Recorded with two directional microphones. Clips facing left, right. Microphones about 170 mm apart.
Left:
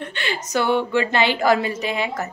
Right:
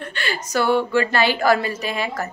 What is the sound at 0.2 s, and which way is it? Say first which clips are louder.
A woman's voice: right 1 dB; 20° left (ahead or behind).